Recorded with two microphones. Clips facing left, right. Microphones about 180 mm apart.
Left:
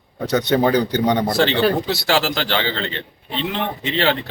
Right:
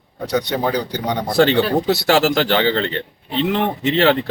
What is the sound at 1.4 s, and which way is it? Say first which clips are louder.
Speech: right 2 dB; 45° right (ahead or behind).